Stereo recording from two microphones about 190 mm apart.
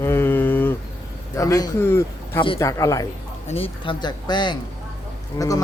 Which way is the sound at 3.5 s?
30° left (ahead or behind).